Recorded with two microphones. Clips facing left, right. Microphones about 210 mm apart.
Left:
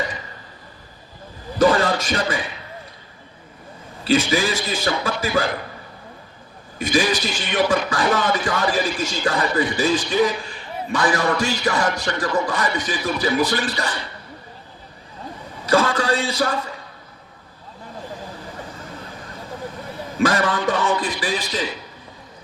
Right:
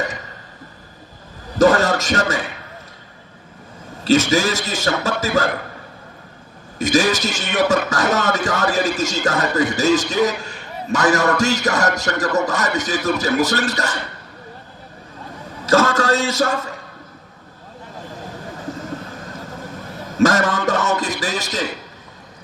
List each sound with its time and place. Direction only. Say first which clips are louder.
1.5 s a sound: right 3 dB; 45° right (ahead or behind)
4.0 s a man's voice: right 3 dB; 45° right (ahead or behind)
6.7 s a man's voice: right 3 dB; 45° right (ahead or behind)
15.6 s a man's voice: right 3 dB; 45° right (ahead or behind)
20.0 s a man's voice: right 4 dB; 45° right (ahead or behind)